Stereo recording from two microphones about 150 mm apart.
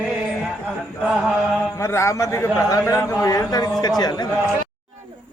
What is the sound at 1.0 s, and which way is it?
Mantra, 5° right (ahead or behind).